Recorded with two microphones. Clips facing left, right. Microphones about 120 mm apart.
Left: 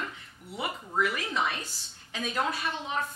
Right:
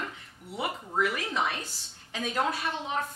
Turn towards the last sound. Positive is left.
turn(degrees=-40)  # may be behind; listen again after turning